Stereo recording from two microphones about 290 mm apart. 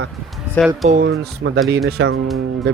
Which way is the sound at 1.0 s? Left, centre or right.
Right.